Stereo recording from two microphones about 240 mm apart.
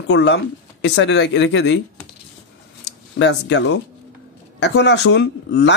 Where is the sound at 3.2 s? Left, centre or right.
Left.